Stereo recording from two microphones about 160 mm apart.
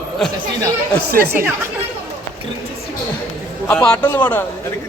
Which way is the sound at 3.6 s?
10° left (ahead or behind).